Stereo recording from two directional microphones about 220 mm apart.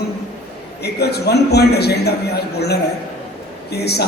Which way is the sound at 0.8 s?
45° left (ahead or behind).